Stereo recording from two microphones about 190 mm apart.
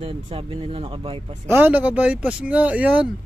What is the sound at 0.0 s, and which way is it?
Speech, 30° right (ahead or behind).